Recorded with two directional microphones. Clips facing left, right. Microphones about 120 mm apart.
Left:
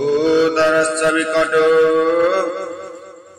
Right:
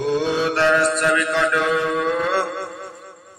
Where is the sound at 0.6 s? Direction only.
30° left (ahead or behind).